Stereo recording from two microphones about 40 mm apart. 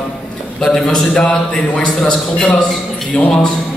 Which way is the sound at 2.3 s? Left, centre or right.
Left.